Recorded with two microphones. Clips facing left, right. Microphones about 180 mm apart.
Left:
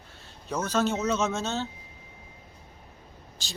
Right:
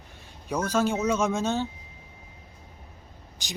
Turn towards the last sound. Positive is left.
turn(degrees=-15)  # may be behind; listen again after turning